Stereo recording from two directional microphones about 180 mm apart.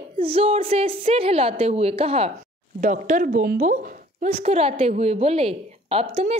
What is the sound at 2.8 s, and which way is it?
A woman's voice, 45° right (ahead or behind).